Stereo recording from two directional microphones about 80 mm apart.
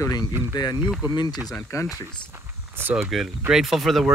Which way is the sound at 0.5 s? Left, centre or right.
Left.